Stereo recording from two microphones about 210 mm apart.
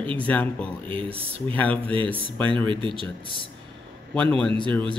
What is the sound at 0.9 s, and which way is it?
Speech, 25° right (ahead or behind).